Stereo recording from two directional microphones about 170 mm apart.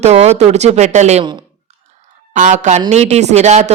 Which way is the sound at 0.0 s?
40° right (ahead or behind).